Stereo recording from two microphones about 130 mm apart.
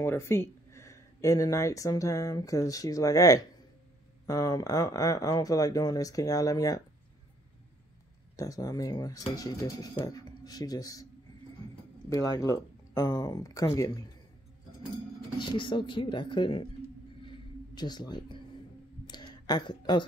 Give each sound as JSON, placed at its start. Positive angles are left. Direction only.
{"t": 0.0, "sound": "speech", "side_deg": 20}
{"t": 8.4, "sound": "speech", "side_deg": 25}
{"t": 12.1, "sound": "speech", "side_deg": 30}
{"t": 15.3, "sound": "speech", "side_deg": 40}
{"t": 17.7, "sound": "speech", "side_deg": 35}
{"t": 19.0, "sound": "a sound", "side_deg": 35}